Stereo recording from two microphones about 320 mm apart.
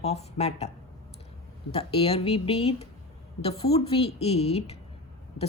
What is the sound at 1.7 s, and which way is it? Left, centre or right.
Speech, centre.